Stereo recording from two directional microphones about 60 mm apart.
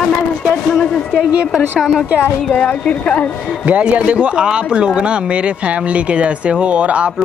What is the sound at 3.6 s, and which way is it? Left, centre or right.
Speech, right.